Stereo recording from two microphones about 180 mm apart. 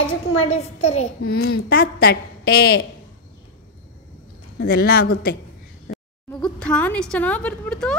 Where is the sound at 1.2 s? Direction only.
60° left (ahead or behind).